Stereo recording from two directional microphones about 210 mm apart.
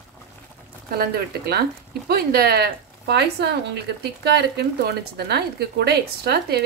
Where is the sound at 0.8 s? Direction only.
45° right (ahead or behind).